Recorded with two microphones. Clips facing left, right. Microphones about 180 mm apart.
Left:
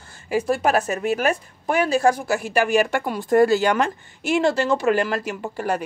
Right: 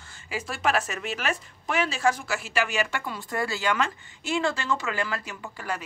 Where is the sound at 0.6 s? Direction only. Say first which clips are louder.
Left 6 dB; 35° left (ahead or behind).